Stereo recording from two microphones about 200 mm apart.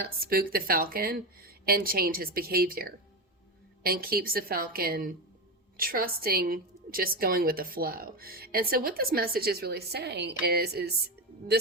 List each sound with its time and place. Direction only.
0.0 s a woman's voice: 50° right (ahead or behind)